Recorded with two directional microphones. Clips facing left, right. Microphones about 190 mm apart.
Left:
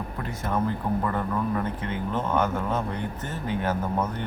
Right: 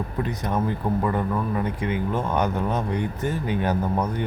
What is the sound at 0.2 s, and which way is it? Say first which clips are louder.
Speech: right 2 dB; 20° right (ahead or behind).